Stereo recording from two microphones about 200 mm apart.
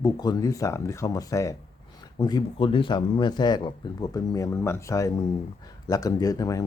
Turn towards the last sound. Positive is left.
turn(degrees=15)  # may be behind; listen again after turning